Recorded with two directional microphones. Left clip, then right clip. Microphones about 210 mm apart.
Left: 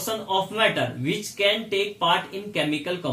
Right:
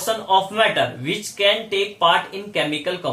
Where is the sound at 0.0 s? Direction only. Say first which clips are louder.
Right 7 dB; 15° left (ahead or behind).